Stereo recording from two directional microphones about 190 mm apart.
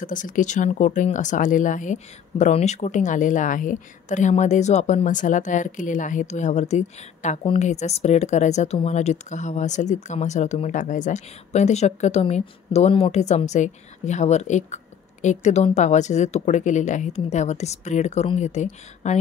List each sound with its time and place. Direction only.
0.0 s speech: 45° left (ahead or behind)